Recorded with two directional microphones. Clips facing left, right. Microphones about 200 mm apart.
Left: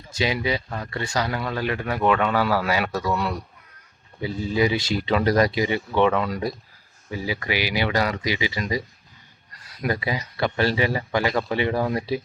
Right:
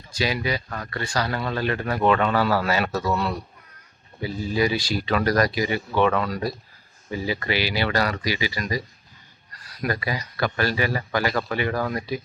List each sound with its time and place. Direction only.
0.1 s speech: 25° left (ahead or behind)
7.1 s speech: 10° left (ahead or behind); by 12.2 s 30° left (ahead or behind)